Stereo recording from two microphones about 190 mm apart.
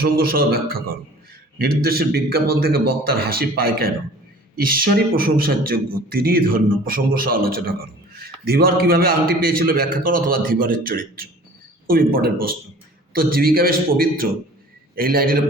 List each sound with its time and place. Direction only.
0.0 s a man's voice: 50° right (ahead or behind)